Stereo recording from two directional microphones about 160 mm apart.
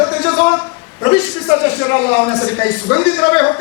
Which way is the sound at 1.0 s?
15° left (ahead or behind).